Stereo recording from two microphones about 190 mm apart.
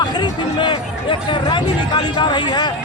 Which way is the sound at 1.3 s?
25° left (ahead or behind).